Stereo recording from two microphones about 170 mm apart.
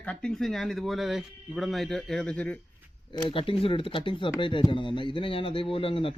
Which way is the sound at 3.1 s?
30° left (ahead or behind).